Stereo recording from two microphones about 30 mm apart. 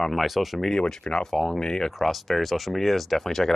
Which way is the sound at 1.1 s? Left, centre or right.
Left.